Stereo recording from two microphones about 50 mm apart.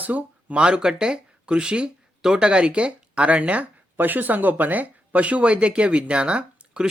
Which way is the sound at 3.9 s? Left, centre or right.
Right.